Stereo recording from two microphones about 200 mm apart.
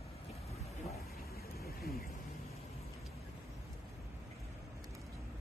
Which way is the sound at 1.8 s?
50° left (ahead or behind).